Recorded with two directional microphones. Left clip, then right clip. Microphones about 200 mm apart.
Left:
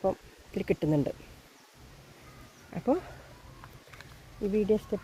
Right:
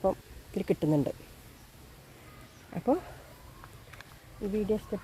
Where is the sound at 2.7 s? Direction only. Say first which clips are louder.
Even; 15° right (ahead or behind).